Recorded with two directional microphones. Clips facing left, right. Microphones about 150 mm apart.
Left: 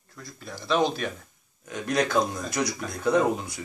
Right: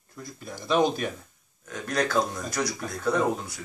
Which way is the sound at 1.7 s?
10° left (ahead or behind).